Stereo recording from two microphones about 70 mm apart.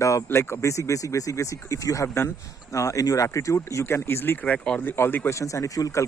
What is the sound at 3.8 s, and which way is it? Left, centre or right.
Speech, left.